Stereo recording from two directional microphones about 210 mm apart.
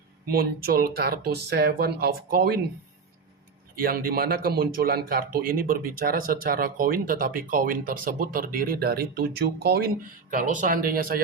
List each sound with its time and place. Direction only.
0.3 s speech: 45° right (ahead or behind)
3.8 s speech: 45° right (ahead or behind)